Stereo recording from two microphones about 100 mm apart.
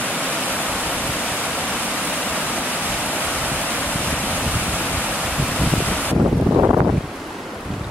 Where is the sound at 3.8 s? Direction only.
15° left (ahead or behind).